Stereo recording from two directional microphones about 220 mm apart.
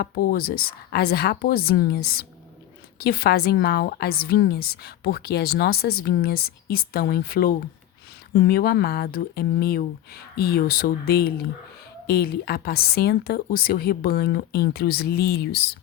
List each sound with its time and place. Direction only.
0.0 s a woman's voice: 45° left (ahead or behind)